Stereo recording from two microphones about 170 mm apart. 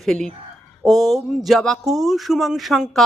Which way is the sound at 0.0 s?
5° left (ahead or behind).